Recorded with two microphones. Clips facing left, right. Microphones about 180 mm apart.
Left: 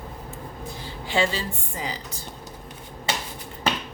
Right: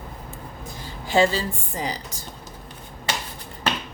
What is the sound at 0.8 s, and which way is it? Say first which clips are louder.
Speech: right 5 dB; 40° right (ahead or behind).